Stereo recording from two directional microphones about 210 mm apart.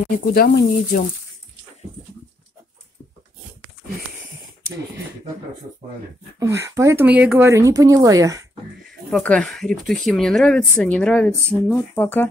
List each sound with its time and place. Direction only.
0.3 s speech: 45° left (ahead or behind)
6.4 s speech: 15° right (ahead or behind)
9.1 s speech: 5° left (ahead or behind)